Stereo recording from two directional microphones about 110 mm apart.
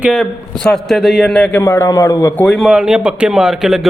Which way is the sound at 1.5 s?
25° left (ahead or behind).